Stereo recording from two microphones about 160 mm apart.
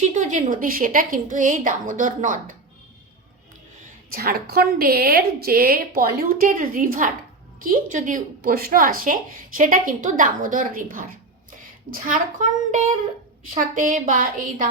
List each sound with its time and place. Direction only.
0.1 s a woman's voice: 50° right (ahead or behind)
4.1 s a woman's voice: 70° right (ahead or behind)
13.5 s a woman's voice: 55° right (ahead or behind)